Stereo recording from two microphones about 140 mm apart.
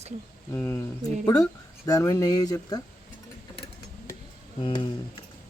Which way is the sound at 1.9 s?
25° left (ahead or behind).